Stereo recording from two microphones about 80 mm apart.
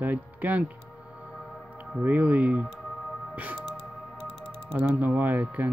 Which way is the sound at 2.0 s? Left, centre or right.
Right.